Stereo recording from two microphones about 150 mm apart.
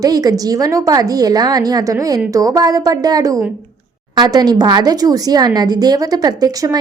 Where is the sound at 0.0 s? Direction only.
25° right (ahead or behind).